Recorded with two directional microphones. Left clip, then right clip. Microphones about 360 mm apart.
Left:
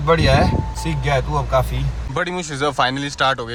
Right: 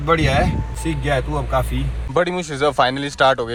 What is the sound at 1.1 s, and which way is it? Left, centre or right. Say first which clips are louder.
Speech: left 2 dB; centre.